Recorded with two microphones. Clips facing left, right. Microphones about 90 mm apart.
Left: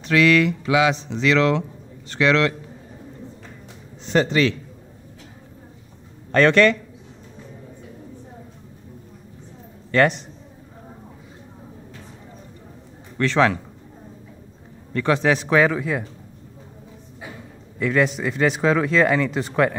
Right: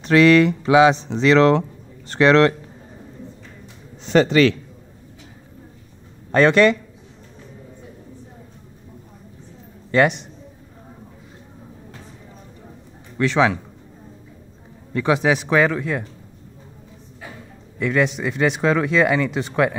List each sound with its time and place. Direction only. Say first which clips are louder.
0.0 s speech: right 4 dB; 35° right (ahead or behind)
4.1 s a man's voice: right 4 dB; 85° right
6.3 s speech: right 1 dB; 15° right (ahead or behind)
9.9 s a man's voice: right 1 dB; 20° right (ahead or behind)
13.2 s speech: right 1 dB; 5° right (ahead or behind)
14.9 s speech: right 1 dB; 10° right (ahead or behind)
17.7 s speech: even; centre (ahead or behind)